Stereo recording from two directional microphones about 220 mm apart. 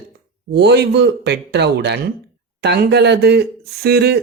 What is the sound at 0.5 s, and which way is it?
Speech, 50° right (ahead or behind).